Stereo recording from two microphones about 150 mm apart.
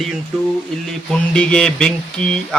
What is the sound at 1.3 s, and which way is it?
Speech, 5° left (ahead or behind).